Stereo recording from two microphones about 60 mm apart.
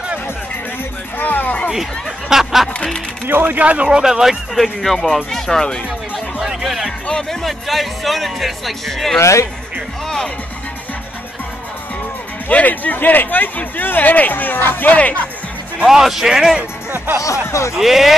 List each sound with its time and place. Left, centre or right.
1.1 s music: left
1.7 s speech: centre
3.3 s speech: right
4.0 s speech: centre
6.1 s music: centre
7.1 s speech: centre
9.2 s speech: left
10.0 s speech: centre
12.4 s speech: left
15.8 s a man's voice: centre
16.9 s music: right
17.5 s speech: left
17.7 s speech: centre